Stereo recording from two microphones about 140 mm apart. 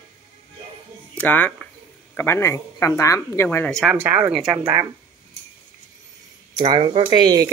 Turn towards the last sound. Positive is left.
turn(degrees=-30)  # may be behind; listen again after turning